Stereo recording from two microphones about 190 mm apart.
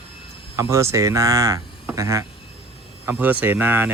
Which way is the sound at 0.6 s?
15° right (ahead or behind).